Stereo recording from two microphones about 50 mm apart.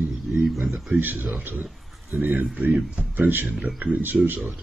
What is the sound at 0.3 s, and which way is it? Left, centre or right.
Speech, centre.